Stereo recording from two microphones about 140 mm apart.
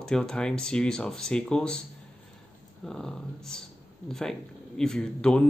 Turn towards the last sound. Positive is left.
turn(degrees=5)  # may be behind; listen again after turning